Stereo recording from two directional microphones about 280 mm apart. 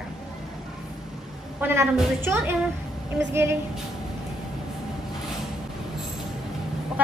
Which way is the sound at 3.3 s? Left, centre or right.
Centre.